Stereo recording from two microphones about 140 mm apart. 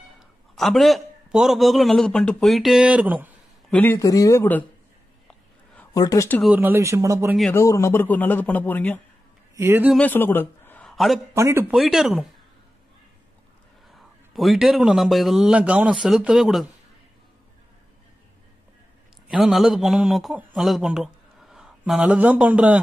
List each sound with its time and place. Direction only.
0.6 s a man's voice: centre (ahead or behind)
3.7 s speech: 15° left (ahead or behind)
5.9 s speech: 20° left (ahead or behind)
6.5 s speech: 15° right (ahead or behind)
7.5 s a man's voice: 20° left (ahead or behind)
9.6 s speech: 20° right (ahead or behind)
9.9 s a man's voice: 15° left (ahead or behind)
10.9 s a sound: centre (ahead or behind)
11.3 s speech: 20° right (ahead or behind)
11.7 s a man's voice: centre (ahead or behind)
13.8 s a man's voice: centre (ahead or behind)
19.3 s a man's voice: centre (ahead or behind)